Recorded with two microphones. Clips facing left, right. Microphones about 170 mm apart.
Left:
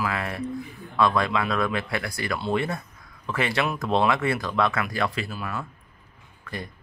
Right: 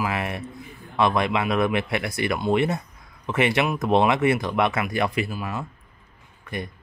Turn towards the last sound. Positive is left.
turn(degrees=-20)  # may be behind; listen again after turning